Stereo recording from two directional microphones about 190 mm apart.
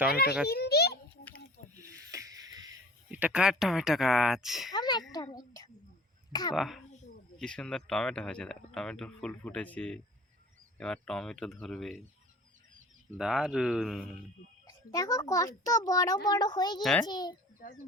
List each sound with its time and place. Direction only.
0.4 s a child's voice: 60° left (ahead or behind)
1.9 s a sound: 15° right (ahead or behind)
3.1 s speech: 10° right (ahead or behind)
4.7 s a child's voice: 20° left (ahead or behind)
6.5 s speech: centre (ahead or behind)
13.1 s speech: 5° right (ahead or behind)
14.7 s a child's voice: 20° left (ahead or behind)
16.8 s speech: 5° left (ahead or behind)
17.1 s a child's voice: 20° left (ahead or behind)